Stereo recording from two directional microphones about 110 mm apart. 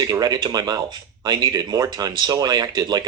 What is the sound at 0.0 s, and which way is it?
A man's voice, 40° right (ahead or behind).